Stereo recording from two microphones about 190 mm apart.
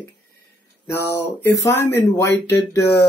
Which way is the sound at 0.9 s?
10° left (ahead or behind).